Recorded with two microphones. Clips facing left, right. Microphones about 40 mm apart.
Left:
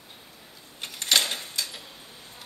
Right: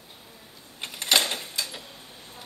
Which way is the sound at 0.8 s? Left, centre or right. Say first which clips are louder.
Right 1 dB; centre.